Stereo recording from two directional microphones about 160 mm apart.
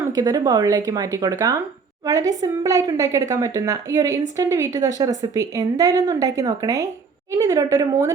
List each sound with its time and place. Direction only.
0.1 s speech: 25° right (ahead or behind)